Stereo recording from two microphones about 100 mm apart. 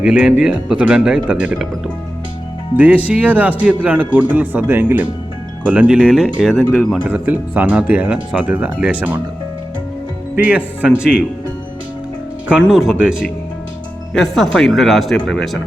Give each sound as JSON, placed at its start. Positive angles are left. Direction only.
{"t": 0.0, "sound": "speech", "side_deg": -10}
{"t": 2.7, "sound": "speech", "side_deg": -15}
{"t": 6.6, "sound": "speech", "side_deg": 10}
{"t": 7.1, "sound": "speech", "side_deg": -20}
{"t": 10.3, "sound": "speech", "side_deg": -15}
{"t": 12.5, "sound": "speech", "side_deg": -5}